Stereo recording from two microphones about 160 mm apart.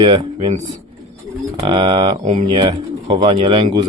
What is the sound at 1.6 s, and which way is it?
Speech, 30° right (ahead or behind).